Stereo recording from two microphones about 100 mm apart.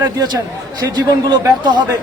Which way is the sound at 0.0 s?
45° right (ahead or behind).